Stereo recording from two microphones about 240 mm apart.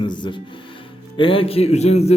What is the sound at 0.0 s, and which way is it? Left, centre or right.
A man's voice, centre.